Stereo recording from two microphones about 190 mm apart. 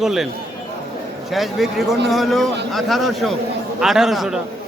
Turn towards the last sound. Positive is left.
turn(degrees=0)  # may be behind; listen again after turning